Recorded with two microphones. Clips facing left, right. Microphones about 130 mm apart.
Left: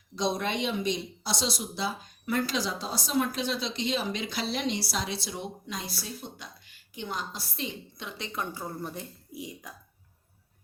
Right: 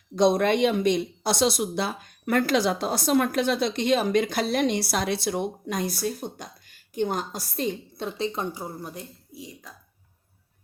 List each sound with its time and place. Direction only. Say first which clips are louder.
0.2 s speech: right 9 dB; 55° right (ahead or behind); by 8.3 s 40° right (ahead or behind)
8.8 s speech: even; centre (ahead or behind)
9.3 s speech: left 3 dB; 15° left (ahead or behind)